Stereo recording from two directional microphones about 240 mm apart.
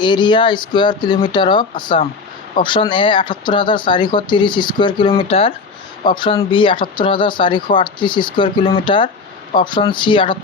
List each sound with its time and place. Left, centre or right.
0.0 s speech: centre